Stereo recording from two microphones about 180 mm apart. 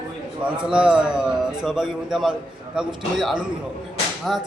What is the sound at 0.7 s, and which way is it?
A man's voice, 5° right (ahead or behind).